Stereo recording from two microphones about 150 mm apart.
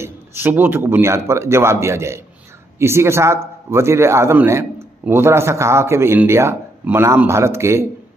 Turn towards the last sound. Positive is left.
turn(degrees=-20)  # may be behind; listen again after turning